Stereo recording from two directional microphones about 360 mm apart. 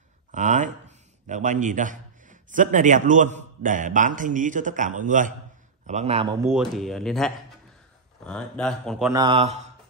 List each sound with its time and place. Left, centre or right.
0.3 s speech: right
6.5 s speech: centre
9.1 s speech: centre